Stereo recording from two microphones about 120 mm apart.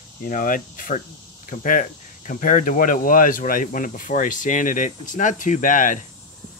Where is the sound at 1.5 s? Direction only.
90° left.